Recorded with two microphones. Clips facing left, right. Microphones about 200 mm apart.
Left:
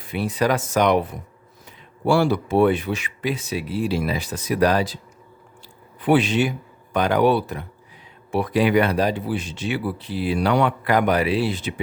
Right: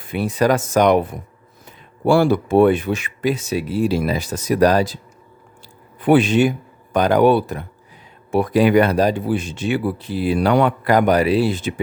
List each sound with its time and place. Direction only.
0.0 s speech: 50° right (ahead or behind)
6.0 s speech: 50° right (ahead or behind)